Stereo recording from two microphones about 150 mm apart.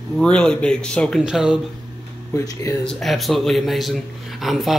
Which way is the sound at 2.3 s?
20° left (ahead or behind).